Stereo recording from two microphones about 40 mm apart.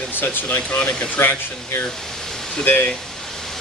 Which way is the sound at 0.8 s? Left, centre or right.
Left.